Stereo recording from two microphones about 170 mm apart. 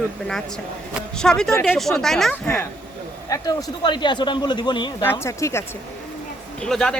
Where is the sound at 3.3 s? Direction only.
25° left (ahead or behind).